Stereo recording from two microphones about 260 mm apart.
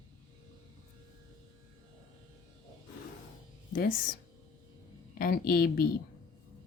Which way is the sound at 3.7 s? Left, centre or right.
Left.